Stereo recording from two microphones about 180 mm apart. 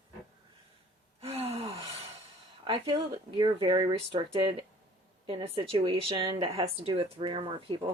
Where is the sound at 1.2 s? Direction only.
35° right (ahead or behind).